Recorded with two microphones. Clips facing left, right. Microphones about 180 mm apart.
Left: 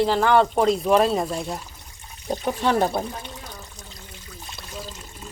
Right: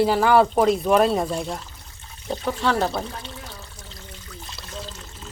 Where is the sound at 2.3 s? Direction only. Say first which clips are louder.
Left 1 dB; 15° left (ahead or behind).